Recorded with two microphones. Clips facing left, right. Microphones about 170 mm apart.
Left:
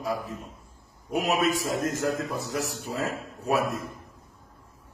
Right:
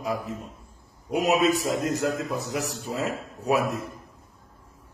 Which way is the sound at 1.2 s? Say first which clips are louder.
Right 3 dB; 20° right (ahead or behind).